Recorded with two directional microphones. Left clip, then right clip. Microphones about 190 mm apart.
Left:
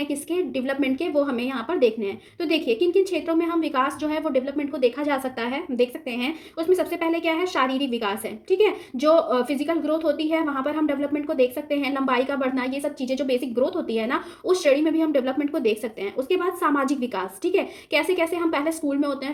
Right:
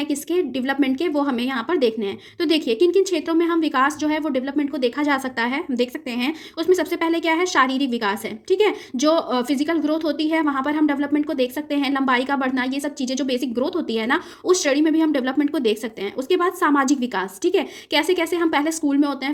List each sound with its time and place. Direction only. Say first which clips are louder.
0.0 s a woman's voice: right 3 dB; 45° right (ahead or behind)